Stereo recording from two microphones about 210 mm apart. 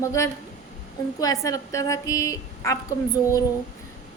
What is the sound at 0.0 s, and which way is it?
A woman's voice, 15° left (ahead or behind).